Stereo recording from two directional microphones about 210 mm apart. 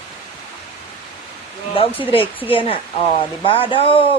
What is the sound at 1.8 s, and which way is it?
Speech, 25° left (ahead or behind).